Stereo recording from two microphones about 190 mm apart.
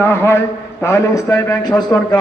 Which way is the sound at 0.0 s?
15° left (ahead or behind).